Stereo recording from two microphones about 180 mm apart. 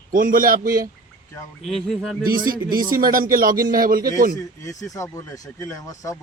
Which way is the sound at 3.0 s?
50° right (ahead or behind).